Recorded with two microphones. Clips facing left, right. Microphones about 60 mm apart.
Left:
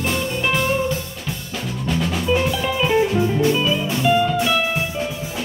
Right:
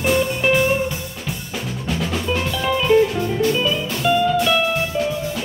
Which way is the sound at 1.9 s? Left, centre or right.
Centre.